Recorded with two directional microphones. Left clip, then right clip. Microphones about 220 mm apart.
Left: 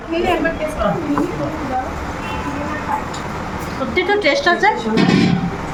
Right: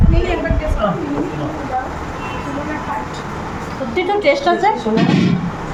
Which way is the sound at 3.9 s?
10° right (ahead or behind).